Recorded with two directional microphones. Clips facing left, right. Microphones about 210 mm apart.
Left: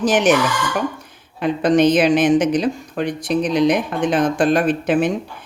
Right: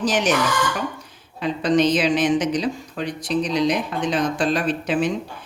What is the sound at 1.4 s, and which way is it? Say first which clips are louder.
A woman's voice: left 4 dB; 55° left (ahead or behind).